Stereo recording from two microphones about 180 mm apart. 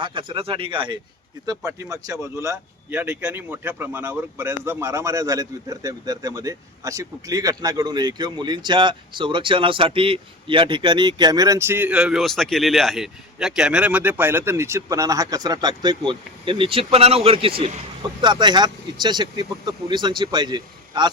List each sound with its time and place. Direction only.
0.0 s speech: 25° right (ahead or behind)